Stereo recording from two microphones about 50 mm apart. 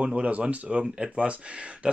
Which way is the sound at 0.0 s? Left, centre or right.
Right.